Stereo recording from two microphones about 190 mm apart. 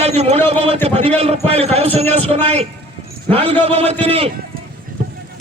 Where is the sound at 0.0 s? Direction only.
35° right (ahead or behind).